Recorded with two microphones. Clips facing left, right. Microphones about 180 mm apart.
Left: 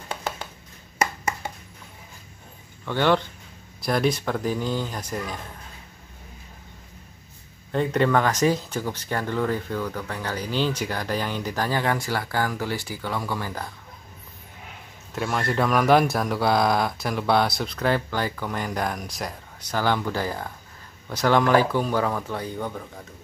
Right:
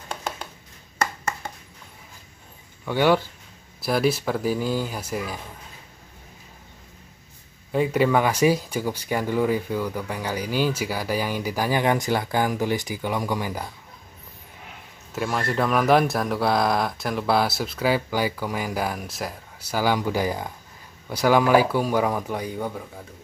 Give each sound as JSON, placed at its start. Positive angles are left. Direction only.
{"t": 2.8, "sound": "speech", "side_deg": -10}
{"t": 7.7, "sound": "speech", "side_deg": -10}
{"t": 15.1, "sound": "speech", "side_deg": 0}